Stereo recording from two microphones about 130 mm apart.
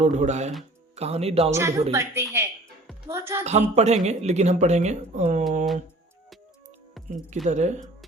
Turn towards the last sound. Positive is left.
turn(degrees=-60)  # may be behind; listen again after turning